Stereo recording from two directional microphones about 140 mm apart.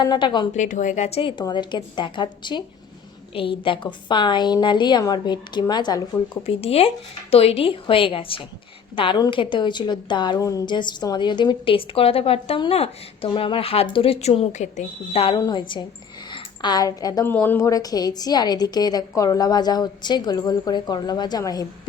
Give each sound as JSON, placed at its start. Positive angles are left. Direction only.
{"t": 0.0, "sound": "a woman's voice", "side_deg": 30}
{"t": 0.5, "sound": "a woman's voice", "side_deg": 60}
{"t": 1.4, "sound": "a woman's voice", "side_deg": 30}
{"t": 6.4, "sound": "a woman's voice", "side_deg": 45}
{"t": 15.4, "sound": "a woman's voice", "side_deg": 30}
{"t": 17.2, "sound": "a woman's voice", "side_deg": 15}